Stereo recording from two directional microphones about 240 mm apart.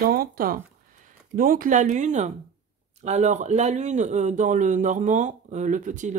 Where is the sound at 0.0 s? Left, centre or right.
Right.